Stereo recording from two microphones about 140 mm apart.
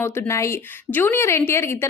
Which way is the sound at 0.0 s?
20° left (ahead or behind).